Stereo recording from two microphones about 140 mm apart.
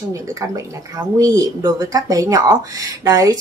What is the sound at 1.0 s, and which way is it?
Speech, 25° right (ahead or behind).